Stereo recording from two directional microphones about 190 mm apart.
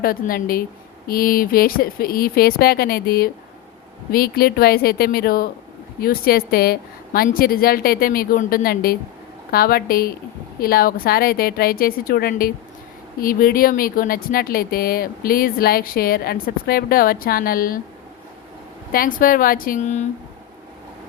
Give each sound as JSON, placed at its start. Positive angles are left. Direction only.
{"t": 0.0, "sound": "speech", "side_deg": 50}
{"t": 18.9, "sound": "speech", "side_deg": 50}